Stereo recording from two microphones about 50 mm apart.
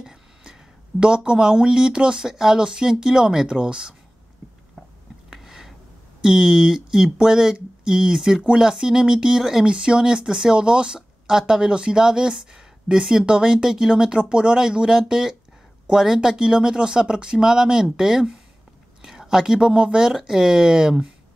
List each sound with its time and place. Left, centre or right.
0.0 s speech: centre
5.3 s a sound: centre
6.2 s speech: centre